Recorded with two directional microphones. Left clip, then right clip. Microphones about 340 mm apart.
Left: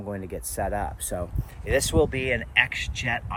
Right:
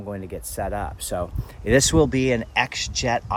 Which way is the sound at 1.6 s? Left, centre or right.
Right.